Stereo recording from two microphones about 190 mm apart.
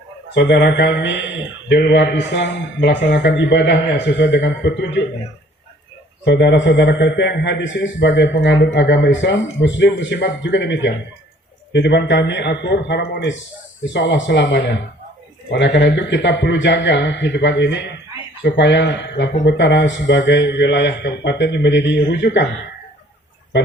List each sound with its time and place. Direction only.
0.3 s a man's voice: 65° left (ahead or behind)
6.2 s a man's voice: 65° left (ahead or behind)